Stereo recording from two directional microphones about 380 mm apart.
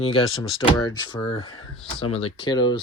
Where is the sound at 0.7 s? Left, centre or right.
Centre.